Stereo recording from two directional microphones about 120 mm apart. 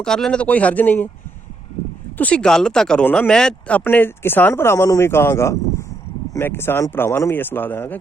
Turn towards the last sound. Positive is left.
turn(degrees=15)  # may be behind; listen again after turning